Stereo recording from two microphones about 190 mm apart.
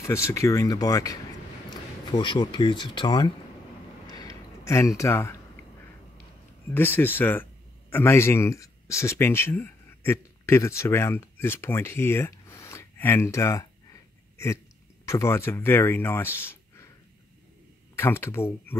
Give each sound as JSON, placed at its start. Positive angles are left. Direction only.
{"t": 0.0, "sound": "speech", "side_deg": 15}
{"t": 4.1, "sound": "a sound", "side_deg": 20}
{"t": 6.7, "sound": "speech", "side_deg": 10}
{"t": 15.0, "sound": "speech", "side_deg": 15}
{"t": 17.9, "sound": "speech", "side_deg": 10}